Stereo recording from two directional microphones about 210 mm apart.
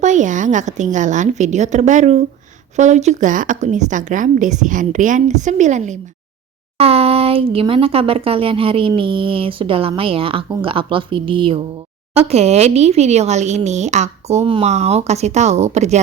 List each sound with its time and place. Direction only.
0.0 s a woman's voice: 35° right (ahead or behind)